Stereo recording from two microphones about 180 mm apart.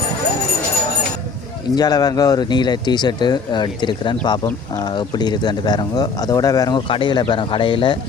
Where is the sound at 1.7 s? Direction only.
20° left (ahead or behind).